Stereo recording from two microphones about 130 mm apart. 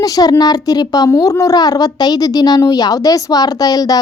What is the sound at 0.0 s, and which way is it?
A woman's voice, 30° left (ahead or behind).